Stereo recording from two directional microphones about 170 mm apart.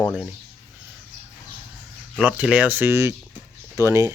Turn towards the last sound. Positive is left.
turn(degrees=-15)  # may be behind; listen again after turning